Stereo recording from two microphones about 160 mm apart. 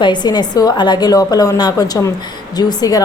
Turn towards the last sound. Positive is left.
turn(degrees=25)  # may be behind; listen again after turning